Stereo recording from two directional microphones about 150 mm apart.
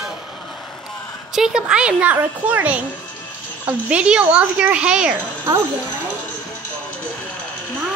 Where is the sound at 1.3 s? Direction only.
5° right (ahead or behind).